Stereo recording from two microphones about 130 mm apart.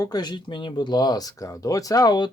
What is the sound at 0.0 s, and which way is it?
Speech, 35° left (ahead or behind).